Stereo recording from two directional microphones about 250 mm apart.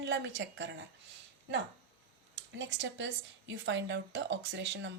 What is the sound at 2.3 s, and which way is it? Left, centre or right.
Speech, right.